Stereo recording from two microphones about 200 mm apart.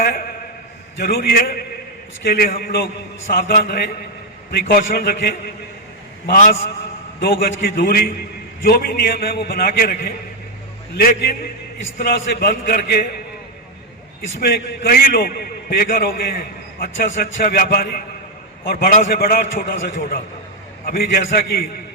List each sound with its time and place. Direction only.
0.9 s a man's voice: 50° left (ahead or behind)
14.3 s a man's voice: 50° left (ahead or behind)